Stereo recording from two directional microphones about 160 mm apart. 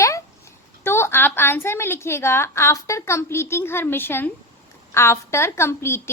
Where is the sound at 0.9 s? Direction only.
15° left (ahead or behind).